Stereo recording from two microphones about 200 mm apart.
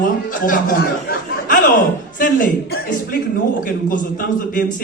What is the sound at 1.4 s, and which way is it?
Chuckle, 45° left (ahead or behind).